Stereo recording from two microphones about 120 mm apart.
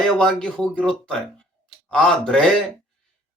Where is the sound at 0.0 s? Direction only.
5° left (ahead or behind).